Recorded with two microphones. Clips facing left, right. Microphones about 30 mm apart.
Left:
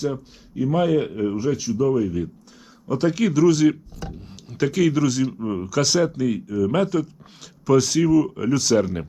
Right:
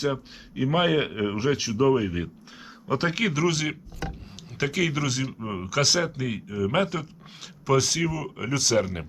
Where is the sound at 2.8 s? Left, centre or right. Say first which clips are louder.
Left 4 dB; right.